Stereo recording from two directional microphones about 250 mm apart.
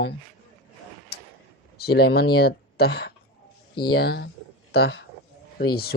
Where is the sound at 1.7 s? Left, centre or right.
Left.